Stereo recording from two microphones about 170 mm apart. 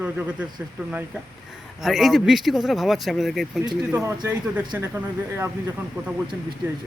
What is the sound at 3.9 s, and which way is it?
Speech, 15° right (ahead or behind).